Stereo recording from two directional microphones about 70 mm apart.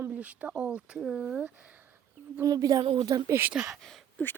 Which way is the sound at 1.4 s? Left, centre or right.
Right.